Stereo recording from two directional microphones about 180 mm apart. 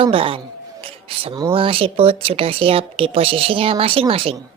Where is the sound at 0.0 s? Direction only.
30° right (ahead or behind).